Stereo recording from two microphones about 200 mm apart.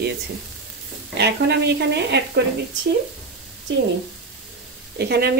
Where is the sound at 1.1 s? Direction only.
55° right (ahead or behind).